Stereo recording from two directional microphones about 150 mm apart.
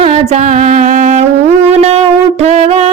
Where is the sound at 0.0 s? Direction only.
50° right (ahead or behind).